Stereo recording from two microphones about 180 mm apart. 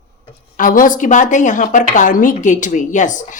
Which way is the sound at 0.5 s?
50° left (ahead or behind).